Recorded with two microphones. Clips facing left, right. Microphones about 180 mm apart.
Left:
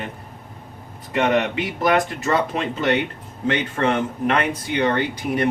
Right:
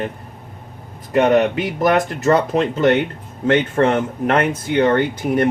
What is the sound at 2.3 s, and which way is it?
Speech, 50° right (ahead or behind).